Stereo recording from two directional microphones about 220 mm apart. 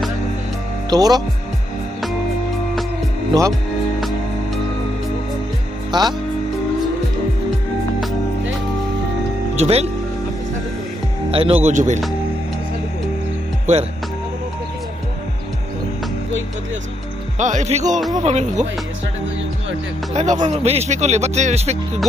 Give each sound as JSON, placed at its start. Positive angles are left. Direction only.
{"t": 0.8, "sound": "speech", "side_deg": -15}
{"t": 3.3, "sound": "speech", "side_deg": -20}
{"t": 5.9, "sound": "speech", "side_deg": -20}
{"t": 9.6, "sound": "speech", "side_deg": -30}
{"t": 11.3, "sound": "speech", "side_deg": -25}
{"t": 17.4, "sound": "speech", "side_deg": -35}
{"t": 20.2, "sound": "speech", "side_deg": -30}